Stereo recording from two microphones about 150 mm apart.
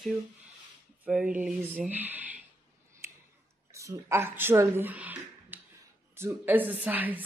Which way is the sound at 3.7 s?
20° right (ahead or behind).